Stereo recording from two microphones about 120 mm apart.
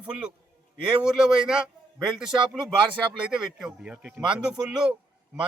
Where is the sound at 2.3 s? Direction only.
40° right (ahead or behind).